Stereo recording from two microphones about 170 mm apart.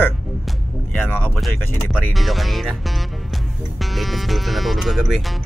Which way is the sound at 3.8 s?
Centre (ahead or behind).